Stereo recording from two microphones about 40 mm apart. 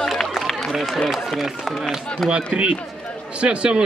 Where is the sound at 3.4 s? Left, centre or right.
Right.